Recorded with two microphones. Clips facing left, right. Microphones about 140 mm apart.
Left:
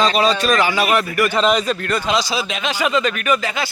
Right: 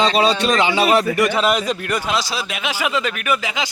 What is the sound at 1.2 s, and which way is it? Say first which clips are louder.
Speech: left 1 dB; 10° right (ahead or behind).